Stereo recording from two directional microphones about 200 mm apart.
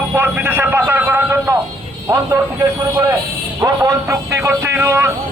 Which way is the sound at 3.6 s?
15° right (ahead or behind).